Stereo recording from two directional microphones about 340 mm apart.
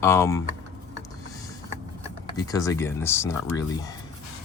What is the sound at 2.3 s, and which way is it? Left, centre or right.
Speech, centre.